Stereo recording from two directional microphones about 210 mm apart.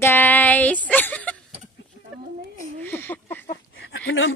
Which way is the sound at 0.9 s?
5° left (ahead or behind).